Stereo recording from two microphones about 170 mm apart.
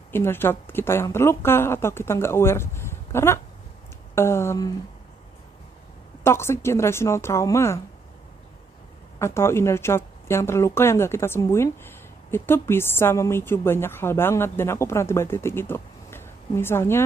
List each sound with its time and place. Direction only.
0.1 s speech: 15° left (ahead or behind)
6.2 s speech: 15° left (ahead or behind)
9.2 s speech: 15° left (ahead or behind)